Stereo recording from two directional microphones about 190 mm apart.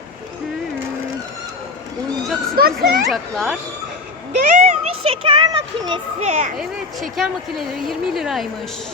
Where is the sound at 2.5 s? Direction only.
50° right (ahead or behind).